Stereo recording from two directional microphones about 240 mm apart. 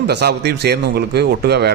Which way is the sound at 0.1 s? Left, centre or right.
Right.